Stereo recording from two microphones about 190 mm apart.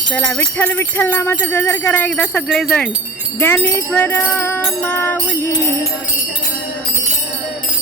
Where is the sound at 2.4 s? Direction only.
Centre (ahead or behind).